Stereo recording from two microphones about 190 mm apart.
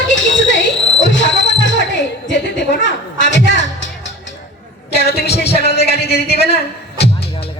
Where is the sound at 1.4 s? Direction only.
70° left (ahead or behind).